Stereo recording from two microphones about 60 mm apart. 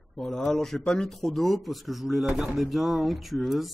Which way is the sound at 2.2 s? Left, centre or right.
Centre.